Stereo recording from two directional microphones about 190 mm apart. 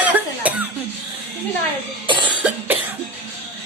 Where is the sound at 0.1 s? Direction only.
10° right (ahead or behind).